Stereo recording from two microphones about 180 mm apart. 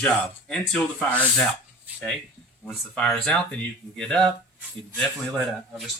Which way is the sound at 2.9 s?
5° left (ahead or behind).